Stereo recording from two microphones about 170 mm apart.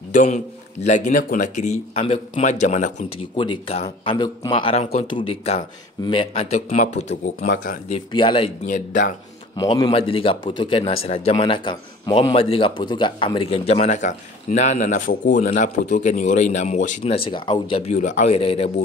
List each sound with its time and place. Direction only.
0.1 s a man's voice: 45° left (ahead or behind)
3.3 s speech: 30° left (ahead or behind); by 7.8 s 55° left (ahead or behind)
7.9 s speech: 30° left (ahead or behind)
8.6 s a man's voice: 50° left (ahead or behind)
9.6 s speech: 25° left (ahead or behind); by 16.9 s 45° left (ahead or behind)
17.0 s speech: 35° left (ahead or behind)
18.4 s speech: 35° left (ahead or behind)